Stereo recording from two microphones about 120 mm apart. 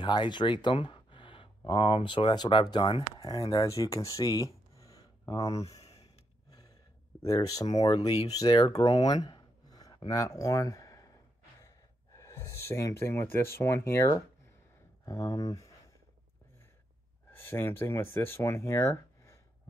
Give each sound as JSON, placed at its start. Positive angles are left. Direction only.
{"t": 0.0, "sound": "speech", "side_deg": 40}
{"t": 5.7, "sound": "a sound", "side_deg": 60}
{"t": 7.2, "sound": "speech", "side_deg": 30}
{"t": 17.3, "sound": "speech", "side_deg": 20}